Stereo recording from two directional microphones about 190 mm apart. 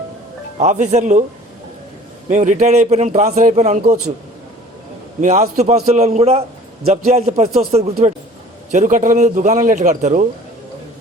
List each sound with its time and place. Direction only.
0.6 s speech: 40° right (ahead or behind)
2.3 s speech: 40° right (ahead or behind)
5.2 s speech: 35° right (ahead or behind)